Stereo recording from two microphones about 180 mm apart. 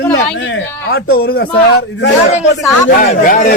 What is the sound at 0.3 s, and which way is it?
Speech, 85° left.